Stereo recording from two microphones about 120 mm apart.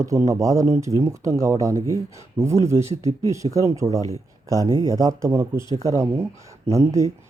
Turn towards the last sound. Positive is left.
turn(degrees=-25)  # may be behind; listen again after turning